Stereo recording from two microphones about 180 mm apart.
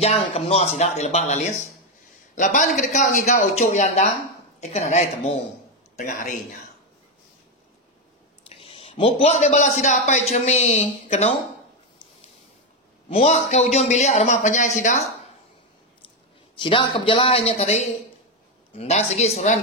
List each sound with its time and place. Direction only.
0.0 s a man's voice: 35° left (ahead or behind)
8.5 s a man's voice: 30° left (ahead or behind)
13.1 s speech: 40° left (ahead or behind)
16.5 s speech: 25° left (ahead or behind)